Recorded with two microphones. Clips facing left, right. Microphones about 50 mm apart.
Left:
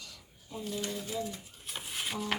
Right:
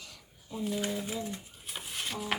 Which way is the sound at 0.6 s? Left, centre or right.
Centre.